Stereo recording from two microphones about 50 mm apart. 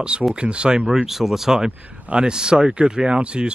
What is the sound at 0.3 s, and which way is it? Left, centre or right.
Speech, centre.